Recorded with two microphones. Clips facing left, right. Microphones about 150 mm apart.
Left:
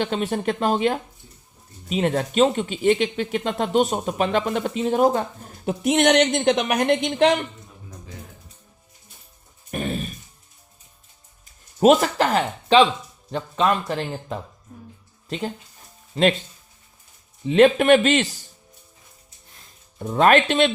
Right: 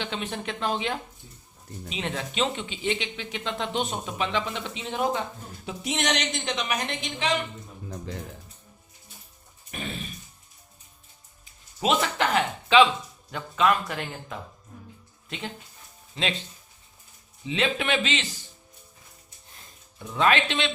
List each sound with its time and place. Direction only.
0.0 s speech: 45° left (ahead or behind)
5.6 s a woman's voice: 55° left (ahead or behind)
7.9 s a sound: 90° right
9.7 s a sound: 45° left (ahead or behind)
11.8 s speech: 45° left (ahead or behind)
17.4 s speech: 50° left (ahead or behind)
20.0 s speech: 50° left (ahead or behind)